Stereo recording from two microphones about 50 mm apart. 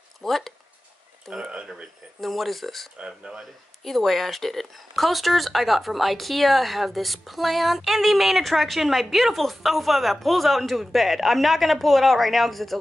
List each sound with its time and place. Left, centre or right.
0.2 s speech: centre
1.3 s a sound: centre
2.1 s speech: centre
3.0 s speech: centre
3.8 s speech: centre